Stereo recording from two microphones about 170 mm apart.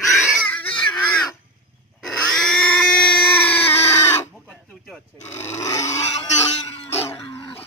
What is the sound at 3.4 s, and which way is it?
Chicken, 10° left (ahead or behind).